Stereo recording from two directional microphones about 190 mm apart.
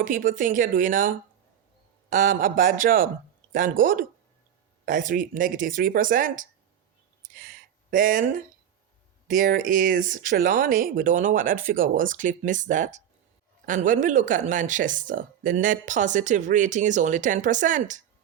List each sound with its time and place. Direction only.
0.0 s a man's voice: 45° right (ahead or behind)
7.3 s a sound: 45° right (ahead or behind)
9.2 s speech: 45° right (ahead or behind)